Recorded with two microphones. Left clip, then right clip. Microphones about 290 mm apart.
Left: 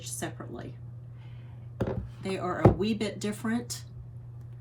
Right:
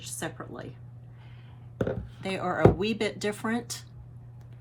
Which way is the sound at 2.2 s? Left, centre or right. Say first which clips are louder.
Right 2 dB; centre.